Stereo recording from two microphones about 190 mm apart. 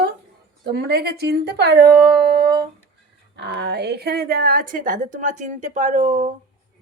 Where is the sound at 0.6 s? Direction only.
60° right (ahead or behind); by 6.3 s 40° right (ahead or behind).